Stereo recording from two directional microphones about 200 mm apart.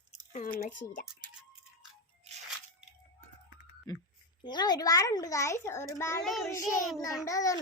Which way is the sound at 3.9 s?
20° left (ahead or behind).